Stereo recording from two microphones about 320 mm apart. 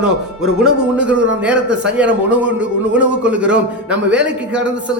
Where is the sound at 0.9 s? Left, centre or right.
Centre.